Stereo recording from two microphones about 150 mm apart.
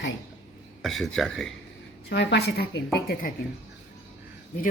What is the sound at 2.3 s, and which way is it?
Speech, 90° left.